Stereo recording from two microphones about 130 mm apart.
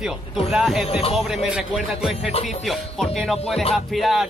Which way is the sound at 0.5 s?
Centre (ahead or behind).